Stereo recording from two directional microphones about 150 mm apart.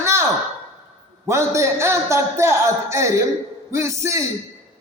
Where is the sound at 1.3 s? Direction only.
20° right (ahead or behind).